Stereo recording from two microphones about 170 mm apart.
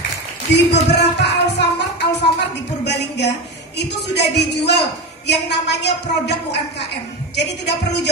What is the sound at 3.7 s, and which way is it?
A woman's voice, 80° left.